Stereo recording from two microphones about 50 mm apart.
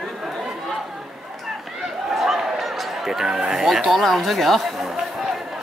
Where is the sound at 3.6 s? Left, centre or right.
Centre.